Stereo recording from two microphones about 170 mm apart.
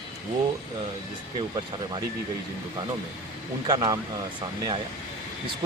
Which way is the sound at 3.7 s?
25° right (ahead or behind).